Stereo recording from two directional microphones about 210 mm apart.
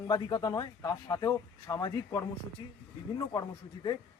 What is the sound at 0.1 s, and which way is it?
A man's voice, 20° left (ahead or behind).